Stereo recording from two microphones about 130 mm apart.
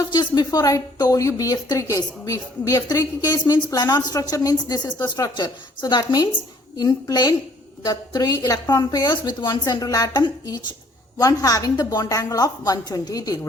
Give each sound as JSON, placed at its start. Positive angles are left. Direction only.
{"t": 0.1, "sound": "a woman's voice", "side_deg": 35}